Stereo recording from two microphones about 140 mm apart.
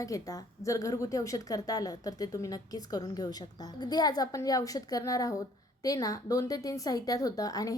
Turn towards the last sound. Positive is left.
turn(degrees=25)  # may be behind; listen again after turning